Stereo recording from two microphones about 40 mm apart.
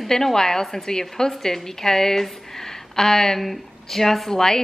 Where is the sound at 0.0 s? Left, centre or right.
Centre.